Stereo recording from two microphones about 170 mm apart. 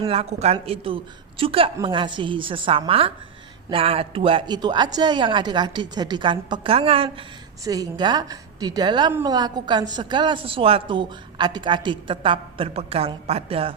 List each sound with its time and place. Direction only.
0.1 s a woman's voice: 35° right (ahead or behind)
7.6 s a woman's voice: 20° right (ahead or behind)